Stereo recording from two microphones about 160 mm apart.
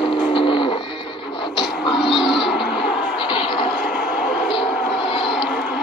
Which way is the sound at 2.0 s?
30° left (ahead or behind).